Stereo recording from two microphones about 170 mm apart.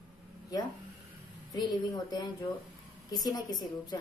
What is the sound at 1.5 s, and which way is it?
A woman's voice, 20° left (ahead or behind).